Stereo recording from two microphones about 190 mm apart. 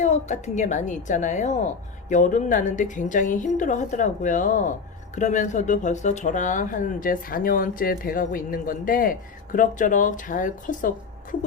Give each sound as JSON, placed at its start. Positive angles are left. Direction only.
{"t": 0.0, "sound": "speech", "side_deg": 35}